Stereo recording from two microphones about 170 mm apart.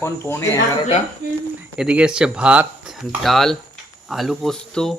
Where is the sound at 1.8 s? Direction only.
5° right (ahead or behind).